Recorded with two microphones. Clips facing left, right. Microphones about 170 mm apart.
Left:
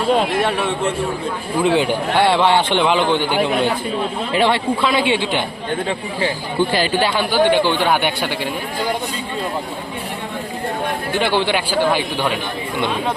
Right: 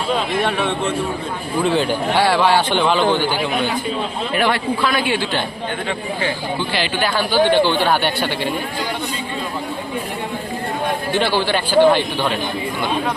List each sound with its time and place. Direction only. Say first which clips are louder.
1.6 s a man's voice: left 1 dB; 15° left (ahead or behind)
6.2 s speech: left 5 dB; 45° left (ahead or behind)
7.0 s speech: right 2 dB; 15° left (ahead or behind)
11.2 s speech: left 2 dB; 20° left (ahead or behind)